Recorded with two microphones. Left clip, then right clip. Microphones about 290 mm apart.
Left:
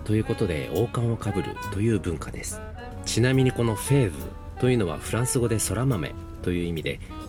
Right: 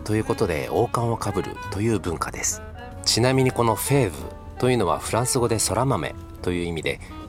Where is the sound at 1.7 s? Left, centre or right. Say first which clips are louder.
Right 2 dB; centre.